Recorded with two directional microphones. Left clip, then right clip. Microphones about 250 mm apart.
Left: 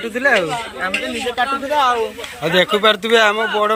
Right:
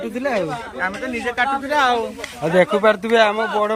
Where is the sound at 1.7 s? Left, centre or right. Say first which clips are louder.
Left 2 dB; left.